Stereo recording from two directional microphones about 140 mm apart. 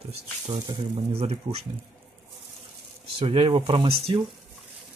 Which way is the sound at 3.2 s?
40° right (ahead or behind).